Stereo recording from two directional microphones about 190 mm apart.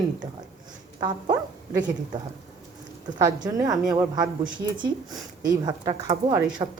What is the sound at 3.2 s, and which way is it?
Speech, 20° right (ahead or behind).